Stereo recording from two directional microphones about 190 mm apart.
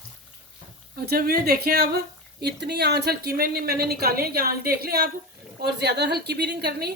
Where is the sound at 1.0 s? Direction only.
55° right (ahead or behind).